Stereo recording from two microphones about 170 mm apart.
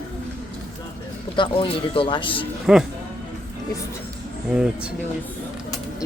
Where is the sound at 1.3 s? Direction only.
30° left (ahead or behind).